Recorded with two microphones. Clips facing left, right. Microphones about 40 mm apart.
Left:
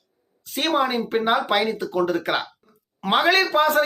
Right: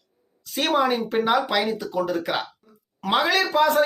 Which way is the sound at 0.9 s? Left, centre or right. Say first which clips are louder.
Even; left.